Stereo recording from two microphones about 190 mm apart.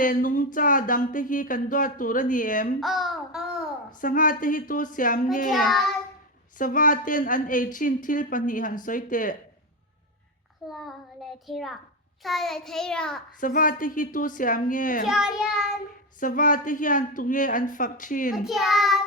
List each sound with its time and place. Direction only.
0.0 s a woman's voice: 45° left (ahead or behind)
2.8 s child singing: centre (ahead or behind)
4.0 s a woman's voice: 45° left (ahead or behind)
5.6 s child singing: centre (ahead or behind)
6.6 s a woman's voice: 45° left (ahead or behind)
10.7 s child singing: centre (ahead or behind)
13.4 s a woman's voice: 45° left (ahead or behind)
15.0 s child singing: 5° right (ahead or behind)
16.2 s a woman's voice: 45° left (ahead or behind)
18.4 s child singing: centre (ahead or behind)